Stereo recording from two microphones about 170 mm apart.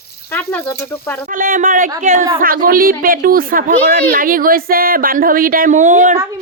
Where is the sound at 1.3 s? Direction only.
55° right (ahead or behind).